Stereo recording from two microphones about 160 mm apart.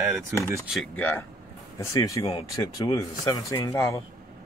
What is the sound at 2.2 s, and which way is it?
Speech, 35° left (ahead or behind).